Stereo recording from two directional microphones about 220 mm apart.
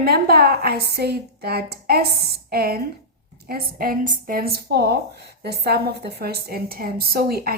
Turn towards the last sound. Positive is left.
turn(degrees=-45)  # may be behind; listen again after turning